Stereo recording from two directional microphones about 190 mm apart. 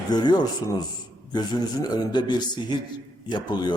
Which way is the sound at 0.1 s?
20° left (ahead or behind).